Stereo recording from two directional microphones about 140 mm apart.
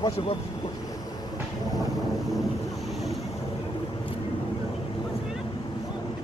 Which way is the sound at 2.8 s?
Centre (ahead or behind).